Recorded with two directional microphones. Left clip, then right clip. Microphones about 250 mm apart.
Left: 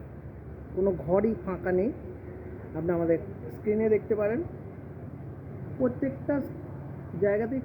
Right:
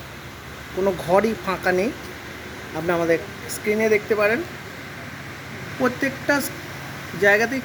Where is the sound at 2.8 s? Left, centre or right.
Centre.